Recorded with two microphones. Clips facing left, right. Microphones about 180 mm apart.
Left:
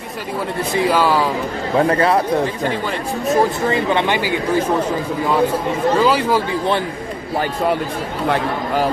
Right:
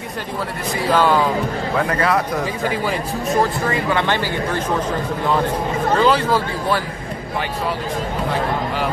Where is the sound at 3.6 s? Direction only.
25° left (ahead or behind).